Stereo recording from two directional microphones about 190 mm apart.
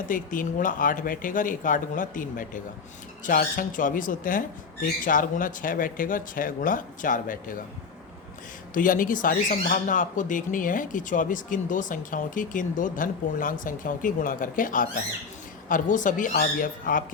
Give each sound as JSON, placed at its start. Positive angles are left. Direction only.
{"t": 0.1, "sound": "speech", "side_deg": 45}
{"t": 8.7, "sound": "speech", "side_deg": 45}